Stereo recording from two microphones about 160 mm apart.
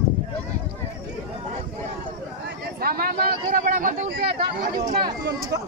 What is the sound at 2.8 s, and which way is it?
Speech, 70° right (ahead or behind).